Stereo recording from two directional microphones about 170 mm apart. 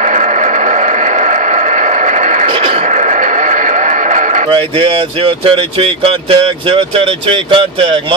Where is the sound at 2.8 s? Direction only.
45° right (ahead or behind).